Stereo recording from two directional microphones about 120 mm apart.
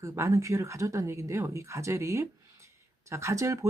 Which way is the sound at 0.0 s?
25° right (ahead or behind).